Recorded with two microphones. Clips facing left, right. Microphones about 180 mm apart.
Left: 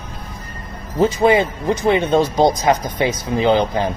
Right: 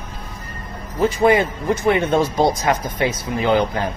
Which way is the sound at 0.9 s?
20° left (ahead or behind).